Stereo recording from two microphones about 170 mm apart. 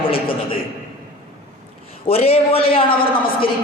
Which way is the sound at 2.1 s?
35° left (ahead or behind).